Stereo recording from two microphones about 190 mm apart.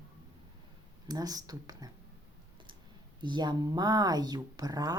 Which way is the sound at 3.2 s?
25° right (ahead or behind).